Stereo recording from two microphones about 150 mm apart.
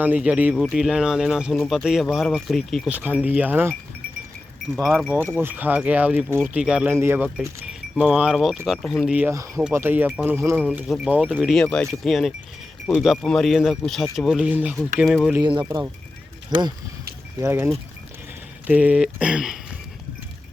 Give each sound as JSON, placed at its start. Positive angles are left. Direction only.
{"t": 0.0, "sound": "speech", "side_deg": -10}
{"t": 2.9, "sound": "speech", "side_deg": -10}
{"t": 4.8, "sound": "speech", "side_deg": 0}
{"t": 5.3, "sound": "speech", "side_deg": -10}
{"t": 10.8, "sound": "speech", "side_deg": -5}
{"t": 15.0, "sound": "speech", "side_deg": 0}
{"t": 15.4, "sound": "speech", "side_deg": -30}
{"t": 17.4, "sound": "speech", "side_deg": -15}
{"t": 18.7, "sound": "speech", "side_deg": -10}